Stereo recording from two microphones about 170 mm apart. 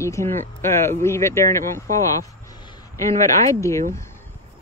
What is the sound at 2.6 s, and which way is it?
Speech, 20° left (ahead or behind).